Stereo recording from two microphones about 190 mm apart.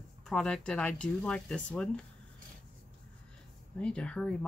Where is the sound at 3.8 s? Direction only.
5° left (ahead or behind).